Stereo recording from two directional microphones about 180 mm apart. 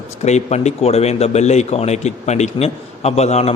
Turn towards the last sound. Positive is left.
turn(degrees=35)  # may be behind; listen again after turning